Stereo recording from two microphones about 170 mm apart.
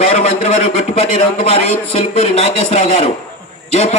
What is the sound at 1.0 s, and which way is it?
A man's voice, 45° left (ahead or behind).